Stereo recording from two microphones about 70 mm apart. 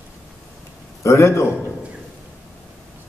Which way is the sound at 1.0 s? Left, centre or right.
Left.